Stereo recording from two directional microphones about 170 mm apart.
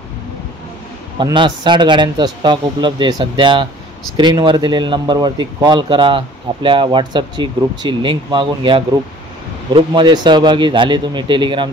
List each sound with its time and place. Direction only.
1.1 s speech: 30° right (ahead or behind)